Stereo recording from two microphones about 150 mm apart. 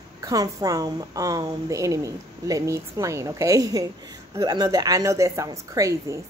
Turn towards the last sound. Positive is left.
turn(degrees=-20)  # may be behind; listen again after turning